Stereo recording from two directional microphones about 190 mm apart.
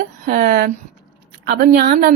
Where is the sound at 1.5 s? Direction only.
55° right (ahead or behind).